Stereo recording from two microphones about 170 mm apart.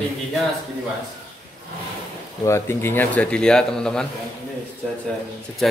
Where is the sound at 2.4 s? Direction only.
15° left (ahead or behind).